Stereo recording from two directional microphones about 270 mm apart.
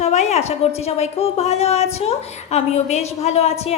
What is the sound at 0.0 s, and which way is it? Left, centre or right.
A woman's voice, left.